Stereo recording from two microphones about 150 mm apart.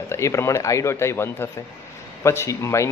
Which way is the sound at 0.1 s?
20° left (ahead or behind).